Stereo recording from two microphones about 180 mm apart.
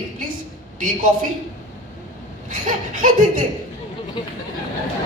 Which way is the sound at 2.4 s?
45° right (ahead or behind).